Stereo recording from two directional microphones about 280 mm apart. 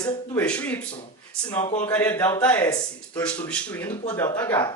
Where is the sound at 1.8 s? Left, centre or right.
Centre.